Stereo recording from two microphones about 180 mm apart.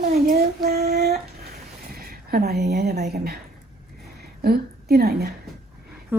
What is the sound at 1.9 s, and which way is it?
Speech, 55° right (ahead or behind).